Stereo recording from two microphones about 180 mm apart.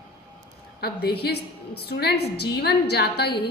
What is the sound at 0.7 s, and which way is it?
A woman's voice, 60° left (ahead or behind).